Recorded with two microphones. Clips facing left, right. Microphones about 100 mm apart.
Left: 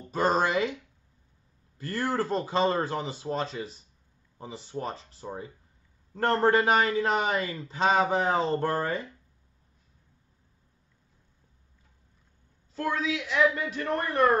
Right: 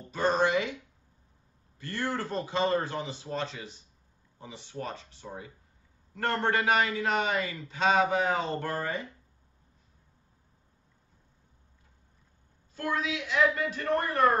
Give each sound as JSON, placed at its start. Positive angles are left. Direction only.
{"t": 0.1, "sound": "a man's voice", "side_deg": 35}
{"t": 1.8, "sound": "a man's voice", "side_deg": 35}
{"t": 12.7, "sound": "a man's voice", "side_deg": 25}